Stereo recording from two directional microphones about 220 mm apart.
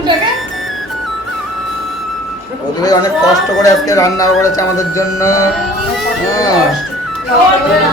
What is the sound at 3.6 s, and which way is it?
Speech, 15° left (ahead or behind).